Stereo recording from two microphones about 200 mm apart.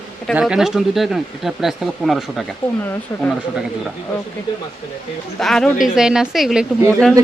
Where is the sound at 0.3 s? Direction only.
5° right (ahead or behind).